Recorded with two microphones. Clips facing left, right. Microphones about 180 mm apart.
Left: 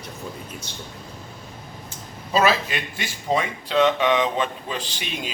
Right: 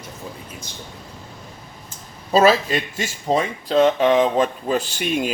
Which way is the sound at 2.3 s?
35° right (ahead or behind).